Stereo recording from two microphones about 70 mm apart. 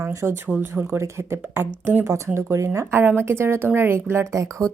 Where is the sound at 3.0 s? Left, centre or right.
Right.